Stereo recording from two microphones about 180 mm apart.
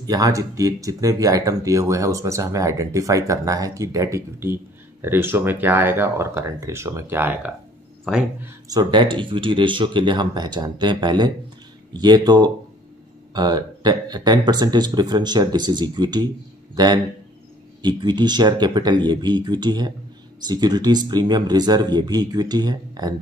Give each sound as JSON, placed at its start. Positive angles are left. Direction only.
{"t": 0.0, "sound": "speech", "side_deg": -20}